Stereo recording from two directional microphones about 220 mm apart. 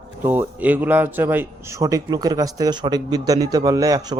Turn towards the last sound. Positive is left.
turn(degrees=-15)  # may be behind; listen again after turning